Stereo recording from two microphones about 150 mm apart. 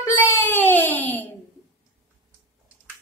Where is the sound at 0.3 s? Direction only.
10° left (ahead or behind).